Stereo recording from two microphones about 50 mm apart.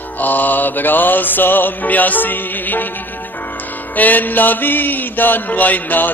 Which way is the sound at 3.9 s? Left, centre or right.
Left.